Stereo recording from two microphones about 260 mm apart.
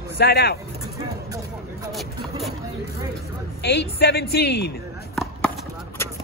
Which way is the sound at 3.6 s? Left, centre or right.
Left.